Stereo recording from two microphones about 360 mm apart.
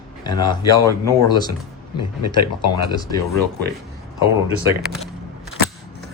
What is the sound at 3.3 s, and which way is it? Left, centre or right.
Speech, right.